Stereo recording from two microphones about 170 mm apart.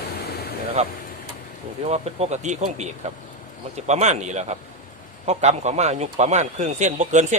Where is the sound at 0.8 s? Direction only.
40° right (ahead or behind).